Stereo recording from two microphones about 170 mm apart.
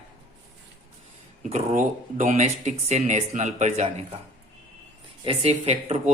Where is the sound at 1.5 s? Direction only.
45° right (ahead or behind).